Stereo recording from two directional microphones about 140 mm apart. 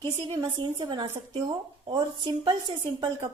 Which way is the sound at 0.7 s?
35° right (ahead or behind).